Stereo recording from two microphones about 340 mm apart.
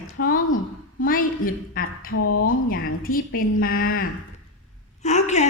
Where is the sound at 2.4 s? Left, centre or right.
Left.